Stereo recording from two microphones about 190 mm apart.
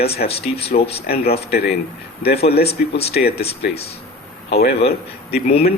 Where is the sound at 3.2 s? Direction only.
55° left (ahead or behind).